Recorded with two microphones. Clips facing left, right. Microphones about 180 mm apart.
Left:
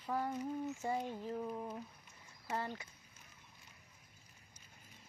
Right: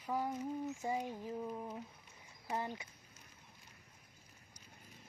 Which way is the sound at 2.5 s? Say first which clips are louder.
Even; 15° right (ahead or behind).